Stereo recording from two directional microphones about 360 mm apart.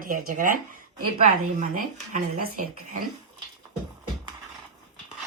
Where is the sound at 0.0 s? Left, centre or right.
Right.